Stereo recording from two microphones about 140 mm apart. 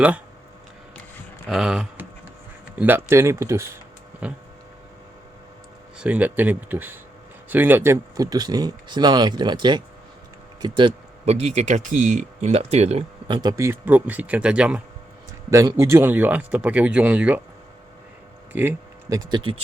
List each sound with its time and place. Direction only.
1.5 s speech: 5° right (ahead or behind)
4.2 s speech: 10° right (ahead or behind)
6.0 s speech: 10° right (ahead or behind); by 10.9 s 35° right (ahead or behind)
11.3 s speech: 50° right (ahead or behind)
13.3 s speech: 30° right (ahead or behind); by 14.8 s 5° right (ahead or behind)
15.4 s speech: 25° right (ahead or behind)
18.5 s speech: 15° right (ahead or behind)
19.2 s speech: 35° right (ahead or behind)